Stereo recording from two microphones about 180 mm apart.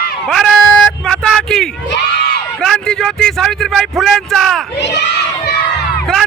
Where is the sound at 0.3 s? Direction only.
Centre (ahead or behind).